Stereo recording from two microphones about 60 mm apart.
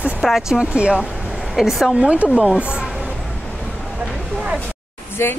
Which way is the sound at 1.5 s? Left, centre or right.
Centre.